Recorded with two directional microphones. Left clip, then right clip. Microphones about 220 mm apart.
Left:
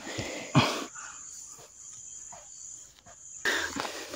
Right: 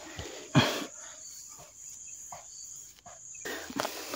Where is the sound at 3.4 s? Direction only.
50° left (ahead or behind).